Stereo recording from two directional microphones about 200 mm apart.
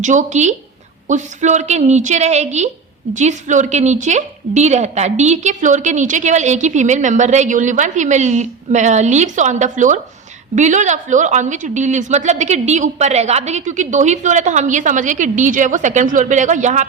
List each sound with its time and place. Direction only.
0.0 s a woman's voice: 40° right (ahead or behind)